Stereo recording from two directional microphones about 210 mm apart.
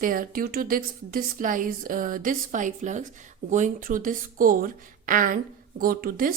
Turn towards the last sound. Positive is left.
turn(degrees=-45)  # may be behind; listen again after turning